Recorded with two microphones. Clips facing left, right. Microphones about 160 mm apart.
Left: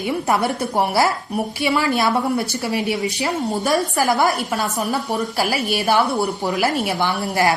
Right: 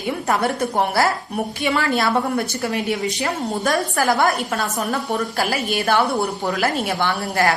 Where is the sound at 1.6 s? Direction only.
15° left (ahead or behind).